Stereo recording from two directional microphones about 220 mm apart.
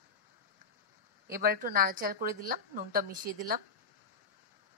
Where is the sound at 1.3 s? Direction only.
40° right (ahead or behind).